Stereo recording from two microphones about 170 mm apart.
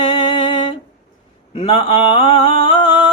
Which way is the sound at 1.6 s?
35° left (ahead or behind).